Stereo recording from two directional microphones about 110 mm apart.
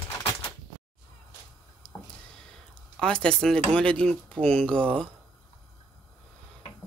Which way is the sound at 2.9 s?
10° left (ahead or behind).